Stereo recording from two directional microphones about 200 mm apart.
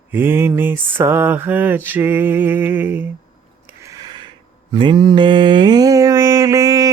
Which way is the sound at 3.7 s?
15° right (ahead or behind).